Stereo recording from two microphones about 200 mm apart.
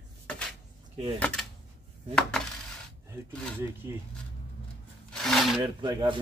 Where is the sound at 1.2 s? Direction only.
5° left (ahead or behind).